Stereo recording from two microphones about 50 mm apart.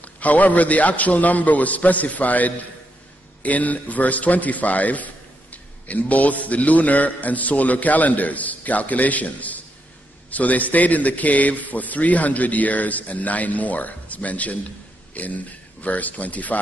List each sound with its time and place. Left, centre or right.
0.0 s a man's voice: left